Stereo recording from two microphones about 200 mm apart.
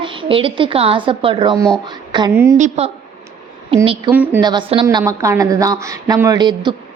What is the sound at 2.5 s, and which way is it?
A woman's voice, 35° right (ahead or behind).